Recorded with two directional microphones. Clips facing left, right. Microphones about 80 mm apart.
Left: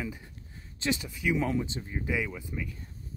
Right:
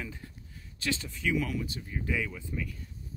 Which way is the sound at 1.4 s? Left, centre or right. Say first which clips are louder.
Left 4 dB; left.